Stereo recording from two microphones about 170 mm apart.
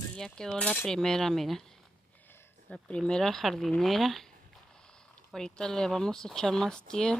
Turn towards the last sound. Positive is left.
turn(degrees=5)  # may be behind; listen again after turning